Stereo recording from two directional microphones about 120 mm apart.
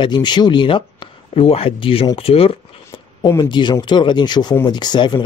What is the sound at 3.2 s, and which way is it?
Speech, 35° left (ahead or behind).